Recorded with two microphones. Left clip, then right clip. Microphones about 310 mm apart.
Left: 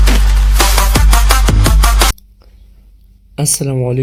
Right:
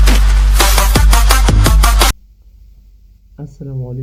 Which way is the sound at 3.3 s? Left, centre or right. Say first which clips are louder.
Left 14 dB; left.